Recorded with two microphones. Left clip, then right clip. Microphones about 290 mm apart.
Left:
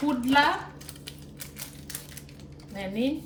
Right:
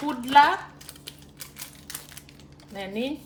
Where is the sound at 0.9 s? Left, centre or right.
Centre.